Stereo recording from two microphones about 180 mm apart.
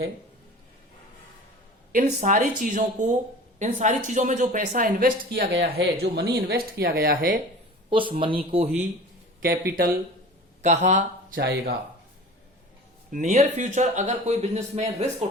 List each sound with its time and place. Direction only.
1.9 s speech: 45° right (ahead or behind)
7.9 s a man's voice: 30° right (ahead or behind)
9.4 s speech: 55° right (ahead or behind)
10.6 s speech: 40° right (ahead or behind)
13.1 s a man's voice: 45° right (ahead or behind)